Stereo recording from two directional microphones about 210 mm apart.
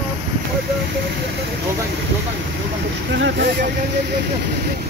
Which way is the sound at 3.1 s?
60° right (ahead or behind).